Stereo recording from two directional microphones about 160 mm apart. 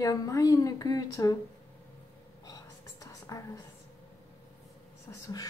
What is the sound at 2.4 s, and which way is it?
Whispering, 20° left (ahead or behind).